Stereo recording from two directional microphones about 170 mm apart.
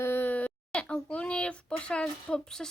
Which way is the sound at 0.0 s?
10° left (ahead or behind).